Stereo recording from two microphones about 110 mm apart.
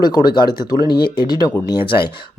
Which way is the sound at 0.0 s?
40° left (ahead or behind).